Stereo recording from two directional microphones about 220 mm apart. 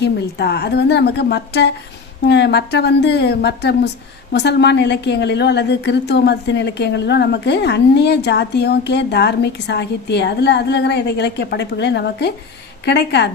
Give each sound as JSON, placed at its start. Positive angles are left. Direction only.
{"t": 0.0, "sound": "a woman's voice", "side_deg": 50}